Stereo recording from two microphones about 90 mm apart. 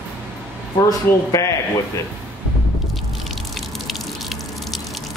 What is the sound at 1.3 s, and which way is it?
Speech, 35° left (ahead or behind).